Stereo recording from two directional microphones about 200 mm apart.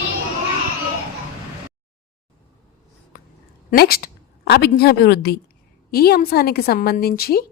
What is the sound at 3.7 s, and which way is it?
A woman's voice, 50° left (ahead or behind).